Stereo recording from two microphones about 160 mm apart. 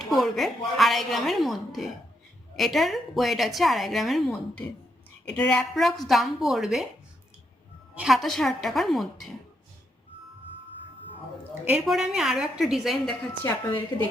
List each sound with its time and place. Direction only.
0.0 s a woman's voice: centre (ahead or behind)
7.9 s a woman's voice: centre (ahead or behind)
11.7 s a woman's voice: 5° right (ahead or behind)
13.9 s a woman's voice: 30° left (ahead or behind)